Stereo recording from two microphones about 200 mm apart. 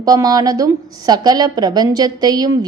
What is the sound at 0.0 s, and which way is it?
A woman's voice, 20° right (ahead or behind).